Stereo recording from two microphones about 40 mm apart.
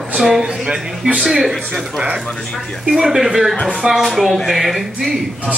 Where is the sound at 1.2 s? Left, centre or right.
Centre.